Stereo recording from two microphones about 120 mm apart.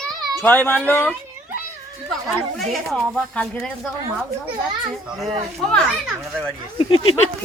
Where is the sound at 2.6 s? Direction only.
5° left (ahead or behind).